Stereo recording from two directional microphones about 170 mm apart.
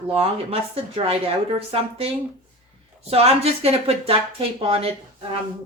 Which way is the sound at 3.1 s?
35° right (ahead or behind).